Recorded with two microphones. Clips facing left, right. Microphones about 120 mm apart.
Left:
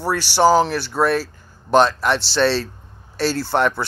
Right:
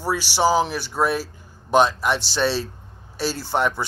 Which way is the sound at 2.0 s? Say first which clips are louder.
Left 4 dB; 10° right (ahead or behind).